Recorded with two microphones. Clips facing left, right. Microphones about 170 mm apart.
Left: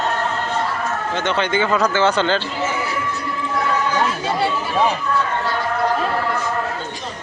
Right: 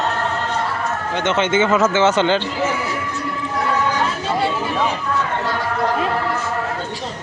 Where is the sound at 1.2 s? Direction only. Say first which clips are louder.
Right 3 dB; 20° right (ahead or behind).